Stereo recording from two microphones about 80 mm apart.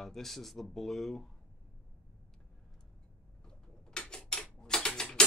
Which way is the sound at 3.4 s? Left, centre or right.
Centre.